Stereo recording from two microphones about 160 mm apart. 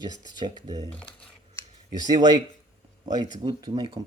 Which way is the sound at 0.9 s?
5° left (ahead or behind).